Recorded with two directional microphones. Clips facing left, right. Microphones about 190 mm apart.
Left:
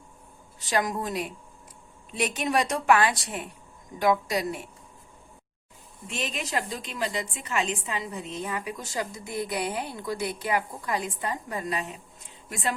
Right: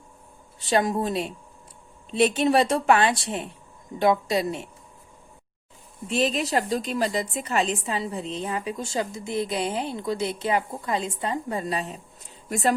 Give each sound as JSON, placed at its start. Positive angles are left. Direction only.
{"t": 0.6, "sound": "a woman's voice", "side_deg": -30}
{"t": 6.1, "sound": "a woman's voice", "side_deg": -35}
{"t": 12.5, "sound": "speech", "side_deg": -40}